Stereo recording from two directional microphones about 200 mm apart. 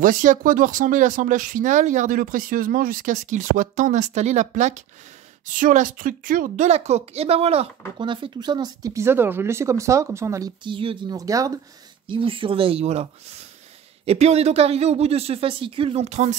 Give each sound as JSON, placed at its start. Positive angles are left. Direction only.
{"t": 0.0, "sound": "speech", "side_deg": -40}